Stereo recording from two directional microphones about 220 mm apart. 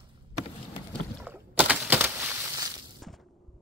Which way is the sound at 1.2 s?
10° right (ahead or behind).